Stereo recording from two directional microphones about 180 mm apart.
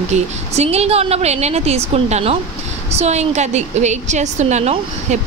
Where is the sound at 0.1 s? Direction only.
35° right (ahead or behind).